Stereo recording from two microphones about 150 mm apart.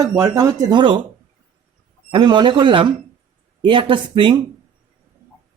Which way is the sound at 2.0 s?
30° right (ahead or behind).